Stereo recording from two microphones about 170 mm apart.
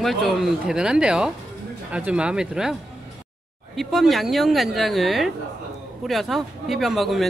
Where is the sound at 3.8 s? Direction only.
Centre (ahead or behind).